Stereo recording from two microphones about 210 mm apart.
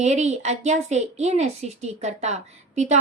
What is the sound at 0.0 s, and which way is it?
Speech, 35° right (ahead or behind).